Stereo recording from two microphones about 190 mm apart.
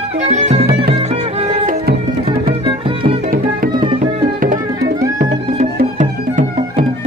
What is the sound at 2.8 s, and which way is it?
Music, 25° right (ahead or behind).